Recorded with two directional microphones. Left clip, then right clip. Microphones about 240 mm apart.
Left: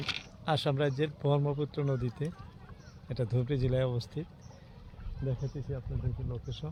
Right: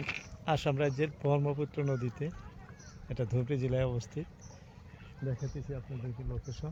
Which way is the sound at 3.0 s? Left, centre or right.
Centre.